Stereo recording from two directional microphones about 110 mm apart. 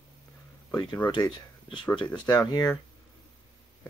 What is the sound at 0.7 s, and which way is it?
Speech, 35° left (ahead or behind).